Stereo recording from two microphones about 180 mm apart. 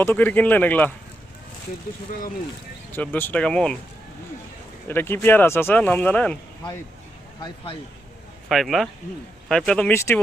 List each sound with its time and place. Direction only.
0.0 s speech: 10° left (ahead or behind)
2.9 s speech: 10° left (ahead or behind)
4.9 s speech: 10° left (ahead or behind)
7.4 s speech: 30° left (ahead or behind)
8.4 s speech: centre (ahead or behind)
9.9 s speech: 15° left (ahead or behind)